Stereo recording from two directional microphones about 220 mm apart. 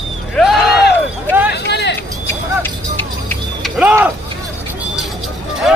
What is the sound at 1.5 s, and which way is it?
Vehicle, 50° left (ahead or behind).